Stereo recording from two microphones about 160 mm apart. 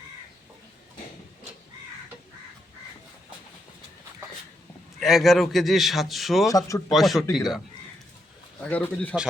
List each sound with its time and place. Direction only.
4.9 s a man's voice: centre (ahead or behind)
6.5 s a man's voice: 20° left (ahead or behind)
6.9 s a man's voice: centre (ahead or behind)
8.6 s speech: 10° left (ahead or behind)